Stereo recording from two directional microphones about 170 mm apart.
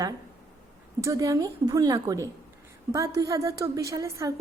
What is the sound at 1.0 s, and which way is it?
A woman's voice, 20° right (ahead or behind).